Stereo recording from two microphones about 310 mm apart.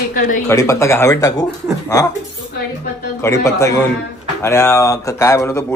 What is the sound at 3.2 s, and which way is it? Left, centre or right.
Speech, centre.